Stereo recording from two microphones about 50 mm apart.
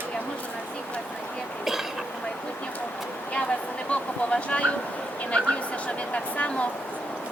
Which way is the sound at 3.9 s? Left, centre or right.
Left.